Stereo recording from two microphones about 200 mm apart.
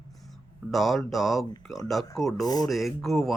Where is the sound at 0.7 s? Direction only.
Centre (ahead or behind).